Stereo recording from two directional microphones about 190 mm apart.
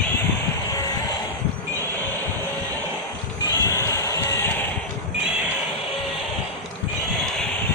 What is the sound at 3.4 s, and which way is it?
Music, 20° left (ahead or behind).